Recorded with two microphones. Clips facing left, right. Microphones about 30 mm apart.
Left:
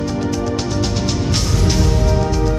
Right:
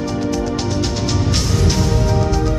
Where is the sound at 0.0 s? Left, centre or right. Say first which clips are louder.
Even; centre.